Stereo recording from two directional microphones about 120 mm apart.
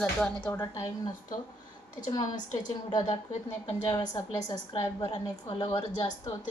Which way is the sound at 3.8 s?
40° left (ahead or behind).